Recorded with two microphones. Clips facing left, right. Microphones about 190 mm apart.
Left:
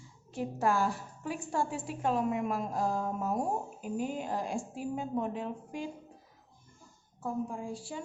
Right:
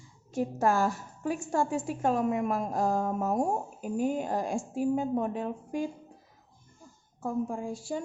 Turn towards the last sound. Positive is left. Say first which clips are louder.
# right 5 dB
turn(degrees=-45)  # may be behind; listen again after turning